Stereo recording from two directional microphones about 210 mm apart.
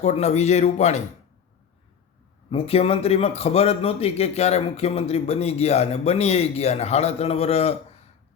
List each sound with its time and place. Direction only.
0.0 s a man's voice: 30° left (ahead or behind)
2.5 s a man's voice: 25° left (ahead or behind)